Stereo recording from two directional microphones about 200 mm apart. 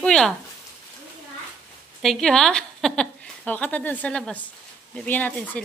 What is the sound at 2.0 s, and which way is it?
A woman's voice, centre (ahead or behind).